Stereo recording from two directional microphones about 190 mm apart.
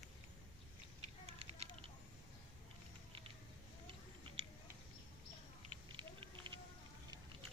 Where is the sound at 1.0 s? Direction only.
35° right (ahead or behind).